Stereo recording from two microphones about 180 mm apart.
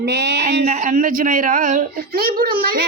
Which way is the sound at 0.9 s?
50° right (ahead or behind).